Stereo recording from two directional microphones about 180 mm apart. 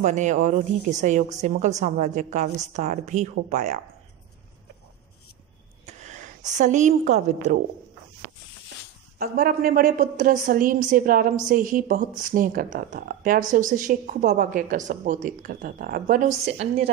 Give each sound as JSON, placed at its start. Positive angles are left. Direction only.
{"t": 0.0, "sound": "a woman's voice", "side_deg": -45}
{"t": 5.9, "sound": "gasp", "side_deg": -40}
{"t": 6.5, "sound": "a woman's voice", "side_deg": -40}
{"t": 9.2, "sound": "speech", "side_deg": -55}